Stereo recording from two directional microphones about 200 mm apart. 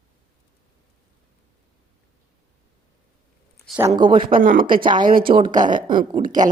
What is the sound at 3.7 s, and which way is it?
Speech, 20° right (ahead or behind).